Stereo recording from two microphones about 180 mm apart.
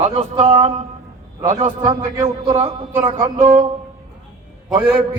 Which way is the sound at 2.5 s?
35° right (ahead or behind).